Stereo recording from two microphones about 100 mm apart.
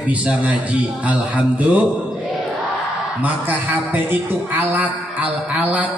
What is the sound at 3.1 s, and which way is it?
A woman's voice, 15° right (ahead or behind).